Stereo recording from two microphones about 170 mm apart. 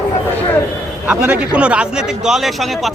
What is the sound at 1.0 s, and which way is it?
A man's voice, 10° right (ahead or behind).